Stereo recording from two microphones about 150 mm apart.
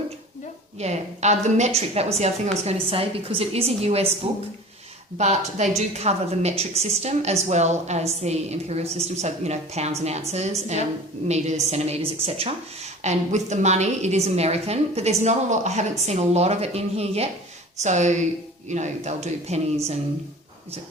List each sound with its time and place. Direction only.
0.8 s a woman's voice: 50° right (ahead or behind)